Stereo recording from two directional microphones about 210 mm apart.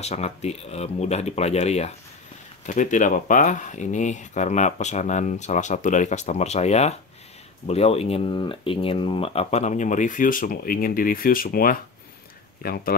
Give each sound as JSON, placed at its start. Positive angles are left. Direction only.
{"t": 0.0, "sound": "speech", "side_deg": 30}